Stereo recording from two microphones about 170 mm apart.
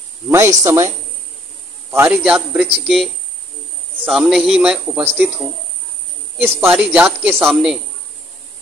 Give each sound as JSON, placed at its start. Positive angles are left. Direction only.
{"t": 0.3, "sound": "a man's voice", "side_deg": -15}
{"t": 6.3, "sound": "a man's voice", "side_deg": -10}